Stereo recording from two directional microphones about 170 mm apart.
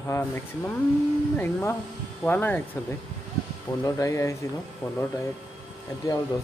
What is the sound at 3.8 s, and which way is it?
Speech, 20° left (ahead or behind).